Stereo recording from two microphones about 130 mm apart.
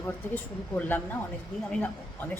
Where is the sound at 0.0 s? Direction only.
15° left (ahead or behind).